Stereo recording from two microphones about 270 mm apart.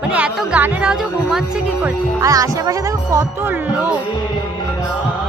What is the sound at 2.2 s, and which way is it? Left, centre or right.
Speech, centre.